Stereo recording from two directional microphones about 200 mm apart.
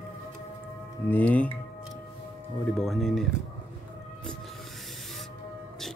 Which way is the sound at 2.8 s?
Centre (ahead or behind).